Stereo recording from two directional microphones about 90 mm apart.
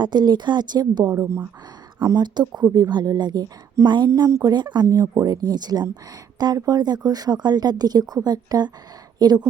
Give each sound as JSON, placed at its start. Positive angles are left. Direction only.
{"t": 0.0, "sound": "speech", "side_deg": -50}
{"t": 1.1, "sound": "speech", "side_deg": -30}
{"t": 2.2, "sound": "speech", "side_deg": -50}
{"t": 4.1, "sound": "speech", "side_deg": -35}
{"t": 4.5, "sound": "speech", "side_deg": -50}